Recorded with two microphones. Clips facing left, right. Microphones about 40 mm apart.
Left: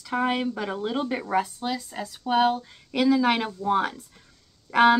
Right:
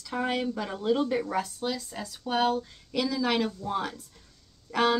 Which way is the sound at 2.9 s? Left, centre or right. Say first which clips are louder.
Left 7 dB; left.